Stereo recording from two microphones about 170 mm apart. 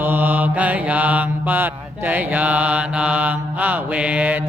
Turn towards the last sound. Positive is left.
turn(degrees=-10)  # may be behind; listen again after turning